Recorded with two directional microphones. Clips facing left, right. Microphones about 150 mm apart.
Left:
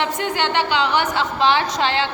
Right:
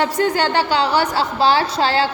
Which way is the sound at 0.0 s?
40° right (ahead or behind).